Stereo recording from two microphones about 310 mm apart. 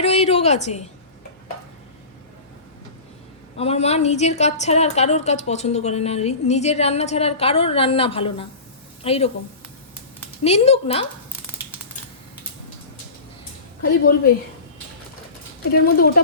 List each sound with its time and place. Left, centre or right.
0.0 s a woman's voice: centre
3.6 s a woman's voice: centre
10.4 s a woman's voice: centre
15.7 s a woman's voice: left